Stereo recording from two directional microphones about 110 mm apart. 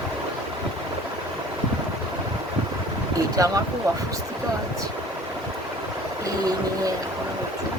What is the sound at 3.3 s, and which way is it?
Speech, 30° right (ahead or behind).